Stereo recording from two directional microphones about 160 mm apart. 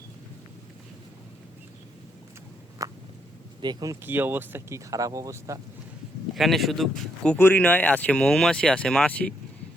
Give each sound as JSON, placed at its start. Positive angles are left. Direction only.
{"t": 2.8, "sound": "a sound", "side_deg": -20}
{"t": 3.6, "sound": "speech", "side_deg": -25}
{"t": 4.0, "sound": "speech", "side_deg": -15}
{"t": 6.3, "sound": "speech", "side_deg": 0}